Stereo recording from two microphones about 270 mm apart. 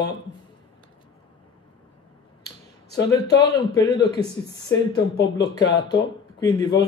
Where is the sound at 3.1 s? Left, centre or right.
Centre.